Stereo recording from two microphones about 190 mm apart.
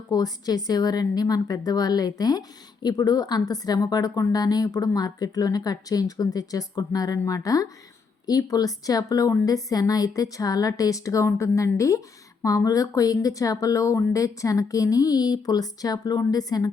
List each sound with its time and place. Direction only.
0.1 s speech: 20° left (ahead or behind)